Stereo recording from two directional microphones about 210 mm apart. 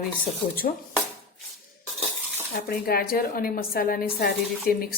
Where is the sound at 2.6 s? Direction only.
45° left (ahead or behind).